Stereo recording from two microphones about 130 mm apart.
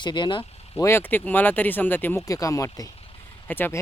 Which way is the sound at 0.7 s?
15° left (ahead or behind).